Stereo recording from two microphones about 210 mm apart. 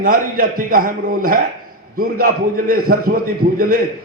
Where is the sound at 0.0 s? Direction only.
40° right (ahead or behind).